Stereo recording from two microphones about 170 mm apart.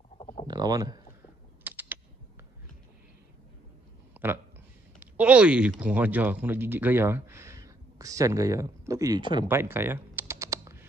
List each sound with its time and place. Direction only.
0.5 s speech: 20° right (ahead or behind)
1.6 s typing: 10° right (ahead or behind)
4.1 s a sound: 10° right (ahead or behind)
5.0 s speech: 5° right (ahead or behind); by 9.5 s 25° right (ahead or behind)
9.5 s computer keyboard: 15° right (ahead or behind)